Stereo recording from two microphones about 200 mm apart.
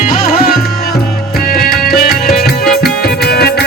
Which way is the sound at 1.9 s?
50° left (ahead or behind).